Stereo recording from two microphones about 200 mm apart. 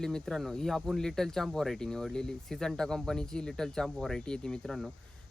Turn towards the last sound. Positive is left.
turn(degrees=0)  # may be behind; listen again after turning